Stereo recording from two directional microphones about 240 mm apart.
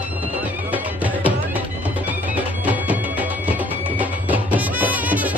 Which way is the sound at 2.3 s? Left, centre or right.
Centre.